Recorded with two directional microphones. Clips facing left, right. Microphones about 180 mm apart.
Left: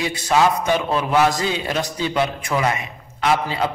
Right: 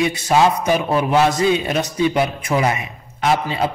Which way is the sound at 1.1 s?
20° right (ahead or behind).